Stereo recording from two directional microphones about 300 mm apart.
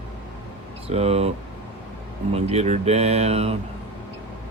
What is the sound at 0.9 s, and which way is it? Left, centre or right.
Speech, right.